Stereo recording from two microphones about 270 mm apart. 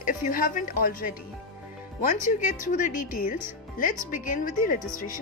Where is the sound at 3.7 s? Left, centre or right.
Left.